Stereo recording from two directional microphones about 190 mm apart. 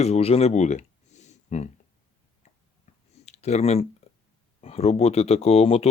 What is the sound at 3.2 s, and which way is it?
Speech, 35° left (ahead or behind).